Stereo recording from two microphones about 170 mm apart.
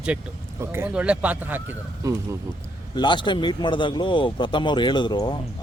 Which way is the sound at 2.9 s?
25° left (ahead or behind).